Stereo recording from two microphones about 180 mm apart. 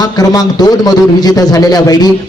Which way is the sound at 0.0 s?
20° left (ahead or behind).